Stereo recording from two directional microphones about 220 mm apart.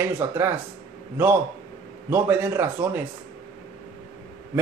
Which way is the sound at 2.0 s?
10° right (ahead or behind).